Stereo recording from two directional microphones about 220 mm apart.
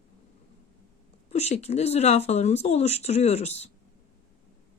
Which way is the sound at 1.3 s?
30° left (ahead or behind).